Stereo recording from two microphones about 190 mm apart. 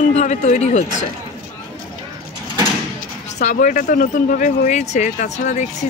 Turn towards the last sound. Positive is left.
turn(degrees=40)  # may be behind; listen again after turning